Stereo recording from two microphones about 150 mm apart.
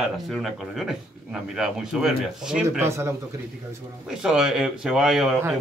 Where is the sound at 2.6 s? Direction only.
20° right (ahead or behind).